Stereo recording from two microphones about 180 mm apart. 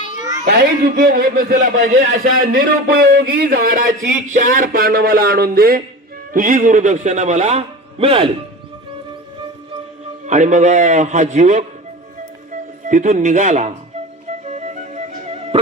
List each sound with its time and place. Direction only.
0.9 s a man's voice: 55° right (ahead or behind); by 8.3 s 35° right (ahead or behind)
10.2 s a man's voice: 40° right (ahead or behind)
12.9 s a man's voice: 45° right (ahead or behind)
14.4 s music: 40° right (ahead or behind)